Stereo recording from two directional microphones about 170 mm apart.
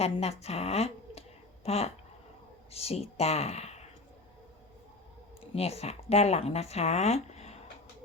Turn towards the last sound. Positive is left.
turn(degrees=40)  # may be behind; listen again after turning